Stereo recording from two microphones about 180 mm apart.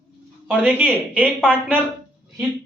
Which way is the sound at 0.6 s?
10° right (ahead or behind).